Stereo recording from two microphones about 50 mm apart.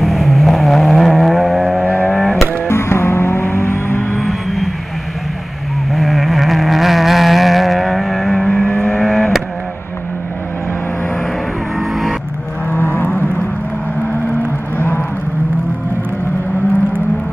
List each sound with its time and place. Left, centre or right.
0.0 s vehicle: centre
2.7 s music: left
4.2 s vehicle: centre
5.9 s vehicle: centre
12.7 s vehicle: left
14.8 s a sound: left